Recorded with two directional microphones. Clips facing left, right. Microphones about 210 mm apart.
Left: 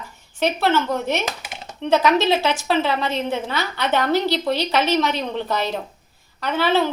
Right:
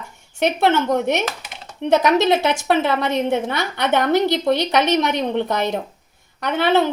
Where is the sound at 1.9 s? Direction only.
20° right (ahead or behind).